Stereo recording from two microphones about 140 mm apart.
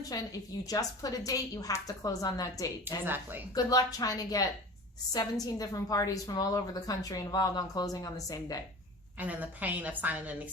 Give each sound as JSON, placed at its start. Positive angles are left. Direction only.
{"t": 0.0, "sound": "a woman's voice", "side_deg": 25}
{"t": 3.0, "sound": "a woman's voice", "side_deg": -15}
{"t": 3.5, "sound": "a woman's voice", "side_deg": 25}
{"t": 9.1, "sound": "a woman's voice", "side_deg": -10}